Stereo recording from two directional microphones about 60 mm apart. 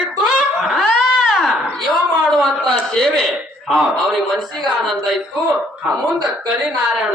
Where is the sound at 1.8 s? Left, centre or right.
Centre.